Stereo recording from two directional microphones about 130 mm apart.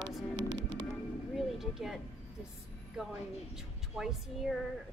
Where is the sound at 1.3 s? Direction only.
5° right (ahead or behind).